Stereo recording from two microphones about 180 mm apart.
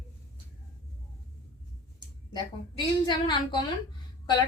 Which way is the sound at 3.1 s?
25° left (ahead or behind).